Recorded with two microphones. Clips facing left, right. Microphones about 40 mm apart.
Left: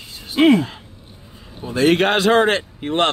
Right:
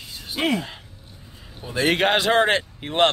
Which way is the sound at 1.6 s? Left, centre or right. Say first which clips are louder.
Left 5 dB; centre.